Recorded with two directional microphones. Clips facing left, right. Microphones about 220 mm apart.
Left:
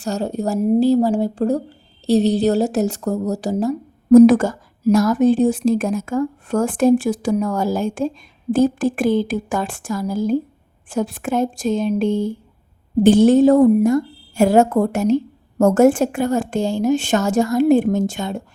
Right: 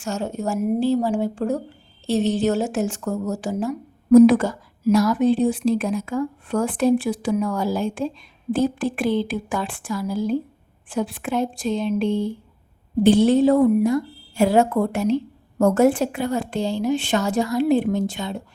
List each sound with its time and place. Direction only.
0.0 s a woman's voice: 35° left (ahead or behind)